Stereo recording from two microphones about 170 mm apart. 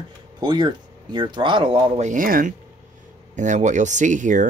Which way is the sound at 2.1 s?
55° right (ahead or behind).